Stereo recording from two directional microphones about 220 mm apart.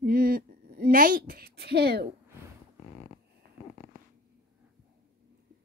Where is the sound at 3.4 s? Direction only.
40° right (ahead or behind).